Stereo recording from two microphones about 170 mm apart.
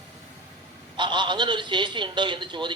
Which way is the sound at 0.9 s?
25° right (ahead or behind).